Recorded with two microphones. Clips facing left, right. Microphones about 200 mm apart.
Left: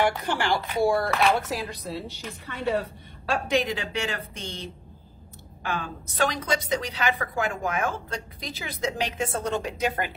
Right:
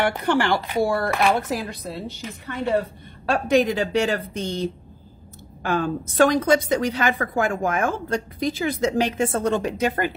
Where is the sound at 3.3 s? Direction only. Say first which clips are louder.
Right 6 dB; 40° right (ahead or behind).